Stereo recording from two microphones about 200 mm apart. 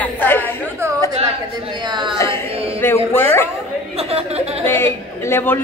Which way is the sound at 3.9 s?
30° right (ahead or behind).